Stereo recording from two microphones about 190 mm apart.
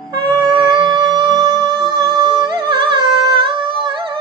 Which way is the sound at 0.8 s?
25° right (ahead or behind).